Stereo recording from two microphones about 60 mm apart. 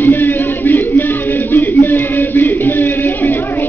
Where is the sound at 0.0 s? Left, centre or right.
Left.